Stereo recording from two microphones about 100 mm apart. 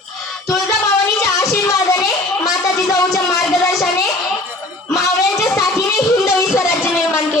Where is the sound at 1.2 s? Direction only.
30° left (ahead or behind).